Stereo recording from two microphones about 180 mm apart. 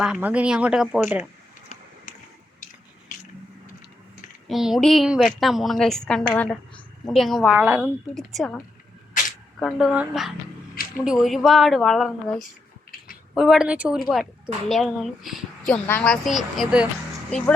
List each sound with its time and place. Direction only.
0.0 s a woman's voice: 5° right (ahead or behind)
1.7 s a sound: 40° left (ahead or behind)
4.4 s a woman's voice: centre (ahead or behind)